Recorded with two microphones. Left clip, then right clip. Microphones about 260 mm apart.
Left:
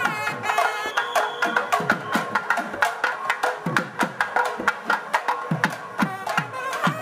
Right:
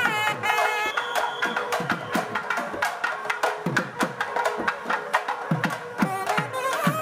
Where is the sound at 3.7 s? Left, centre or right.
Centre.